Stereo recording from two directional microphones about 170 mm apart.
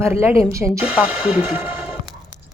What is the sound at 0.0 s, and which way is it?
Speech, 15° right (ahead or behind).